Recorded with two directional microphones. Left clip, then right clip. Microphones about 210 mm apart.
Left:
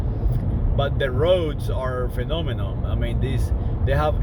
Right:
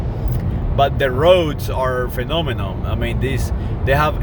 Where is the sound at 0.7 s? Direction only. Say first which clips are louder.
Right 8 dB; 25° right (ahead or behind).